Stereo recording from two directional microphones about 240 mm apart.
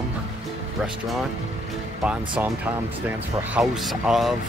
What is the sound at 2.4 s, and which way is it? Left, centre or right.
Speech, centre.